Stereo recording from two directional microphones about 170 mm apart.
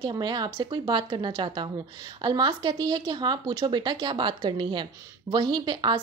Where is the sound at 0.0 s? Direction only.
25° right (ahead or behind).